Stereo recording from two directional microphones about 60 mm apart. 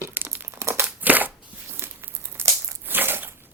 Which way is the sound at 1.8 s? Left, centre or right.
Right.